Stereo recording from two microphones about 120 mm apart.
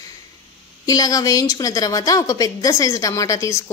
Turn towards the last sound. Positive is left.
turn(degrees=25)  # may be behind; listen again after turning